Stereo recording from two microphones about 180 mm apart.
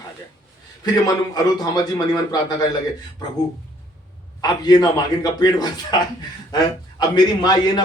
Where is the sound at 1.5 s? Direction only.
20° left (ahead or behind).